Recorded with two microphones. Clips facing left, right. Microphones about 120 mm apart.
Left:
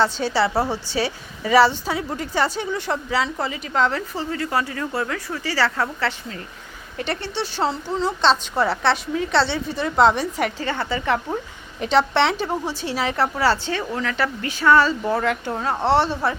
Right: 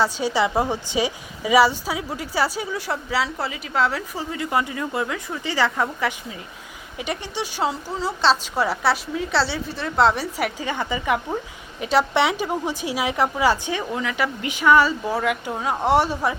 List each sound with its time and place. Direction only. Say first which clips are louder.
0.0 s a woman's voice: left 1 dB; 10° right (ahead or behind)